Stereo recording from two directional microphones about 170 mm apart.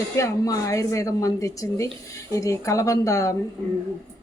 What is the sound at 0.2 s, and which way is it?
Speech, 20° left (ahead or behind).